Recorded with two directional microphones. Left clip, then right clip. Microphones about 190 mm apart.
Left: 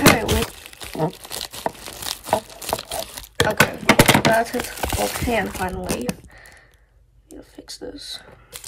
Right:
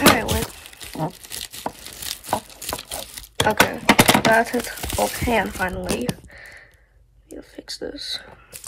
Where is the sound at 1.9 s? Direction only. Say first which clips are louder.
Left 2 dB; centre (ahead or behind).